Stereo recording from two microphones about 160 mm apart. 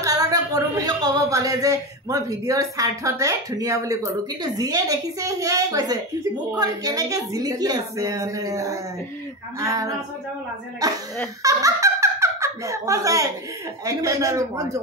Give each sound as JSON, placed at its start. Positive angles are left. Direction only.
{"t": 0.0, "sound": "a woman's voice", "side_deg": -20}